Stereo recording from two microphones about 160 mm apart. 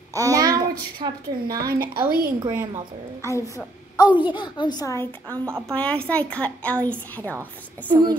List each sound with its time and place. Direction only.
0.1 s a woman's voice: 20° right (ahead or behind)
1.6 s a woman's voice: 70° right (ahead or behind)
2.4 s a woman's voice: 20° right (ahead or behind)
3.3 s a child's voice: 20° left (ahead or behind)
4.1 s a woman's voice: 10° right (ahead or behind)
4.4 s a woman's voice: 25° left (ahead or behind); by 7.3 s 10° left (ahead or behind)